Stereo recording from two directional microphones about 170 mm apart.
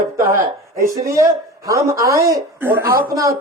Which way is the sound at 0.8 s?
20° right (ahead or behind).